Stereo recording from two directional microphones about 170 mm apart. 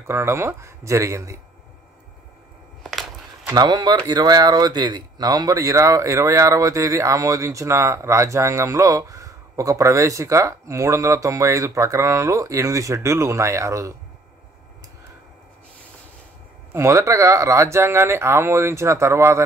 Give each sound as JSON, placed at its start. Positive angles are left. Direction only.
{"t": 0.0, "sound": "speech", "side_deg": -15}
{"t": 2.8, "sound": "a sound", "side_deg": 0}
{"t": 3.5, "sound": "speech", "side_deg": -25}
{"t": 16.7, "sound": "speech", "side_deg": -15}